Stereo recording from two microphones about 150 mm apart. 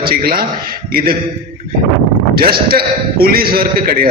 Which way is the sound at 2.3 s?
85° right.